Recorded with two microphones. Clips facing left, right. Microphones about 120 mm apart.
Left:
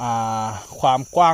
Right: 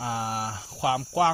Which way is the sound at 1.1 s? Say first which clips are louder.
Left 7 dB; 90° left.